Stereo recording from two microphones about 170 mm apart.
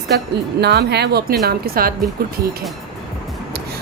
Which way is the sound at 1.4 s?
60° right (ahead or behind).